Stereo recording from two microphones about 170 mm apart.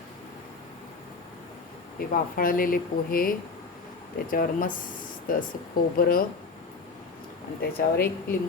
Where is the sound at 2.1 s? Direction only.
55° left (ahead or behind).